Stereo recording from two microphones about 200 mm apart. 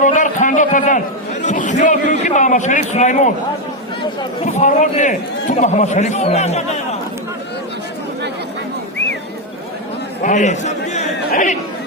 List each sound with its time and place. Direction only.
0.0 s a man's voice: 40° left (ahead or behind)
4.5 s a man's voice: 35° left (ahead or behind)
10.2 s chatter: 35° left (ahead or behind)